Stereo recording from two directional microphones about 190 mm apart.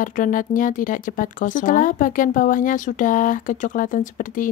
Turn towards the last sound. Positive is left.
turn(degrees=45)  # may be behind; listen again after turning